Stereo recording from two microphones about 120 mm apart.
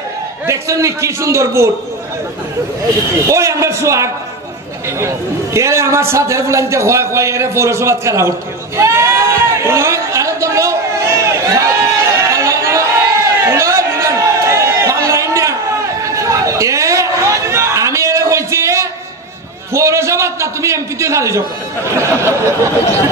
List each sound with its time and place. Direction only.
0.5 s a man's voice: 25° right (ahead or behind)
3.3 s a man's voice: 25° right (ahead or behind)
8.7 s a sound: 25° right (ahead or behind)
16.0 s chatter: 25° right (ahead or behind)
19.7 s a man's voice: 25° right (ahead or behind)